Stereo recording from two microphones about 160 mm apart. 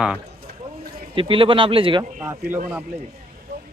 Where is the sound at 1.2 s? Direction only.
35° right (ahead or behind).